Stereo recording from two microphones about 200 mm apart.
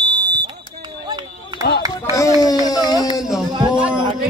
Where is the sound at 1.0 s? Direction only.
20° right (ahead or behind).